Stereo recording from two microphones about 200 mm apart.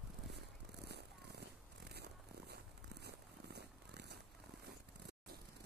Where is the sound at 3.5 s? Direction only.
55° right (ahead or behind).